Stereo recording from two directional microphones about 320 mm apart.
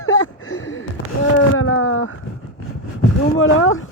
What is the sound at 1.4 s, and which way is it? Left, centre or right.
Speech, left.